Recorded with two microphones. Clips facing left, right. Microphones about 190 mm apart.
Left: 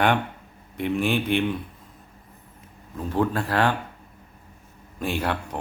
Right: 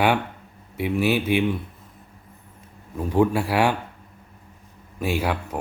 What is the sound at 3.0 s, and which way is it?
Speech, 15° right (ahead or behind).